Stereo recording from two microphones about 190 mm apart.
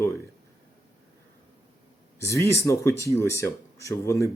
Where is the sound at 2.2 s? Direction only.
15° left (ahead or behind).